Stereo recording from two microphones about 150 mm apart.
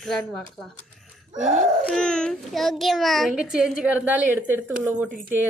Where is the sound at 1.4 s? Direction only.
50° right (ahead or behind).